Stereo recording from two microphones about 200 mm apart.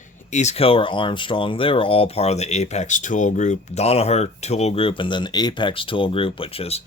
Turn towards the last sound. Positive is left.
turn(degrees=30)  # may be behind; listen again after turning